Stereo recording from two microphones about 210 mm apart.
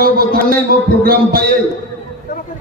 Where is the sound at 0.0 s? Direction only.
45° right (ahead or behind).